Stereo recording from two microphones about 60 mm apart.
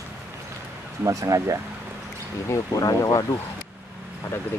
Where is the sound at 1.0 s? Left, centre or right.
Right.